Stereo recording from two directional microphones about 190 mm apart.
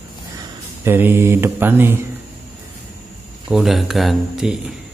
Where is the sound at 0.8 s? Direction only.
10° right (ahead or behind).